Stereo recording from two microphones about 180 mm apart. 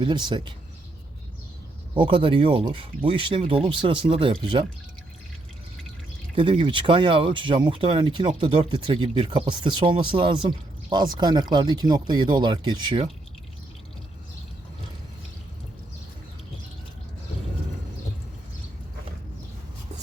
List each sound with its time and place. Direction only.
0.0 s speech: 25° right (ahead or behind)
2.0 s speech: 30° right (ahead or behind)
6.3 s speech: 30° right (ahead or behind)